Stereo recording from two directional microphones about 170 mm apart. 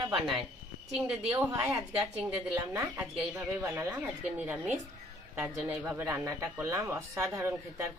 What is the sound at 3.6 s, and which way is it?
Speech, 15° right (ahead or behind).